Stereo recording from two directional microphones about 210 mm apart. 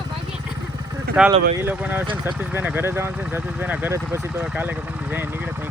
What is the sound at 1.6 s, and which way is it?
Speech, 10° right (ahead or behind).